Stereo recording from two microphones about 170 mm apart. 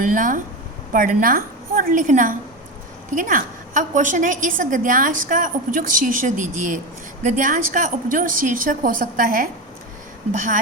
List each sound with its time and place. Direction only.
0.0 s a woman's voice: 50° right (ahead or behind)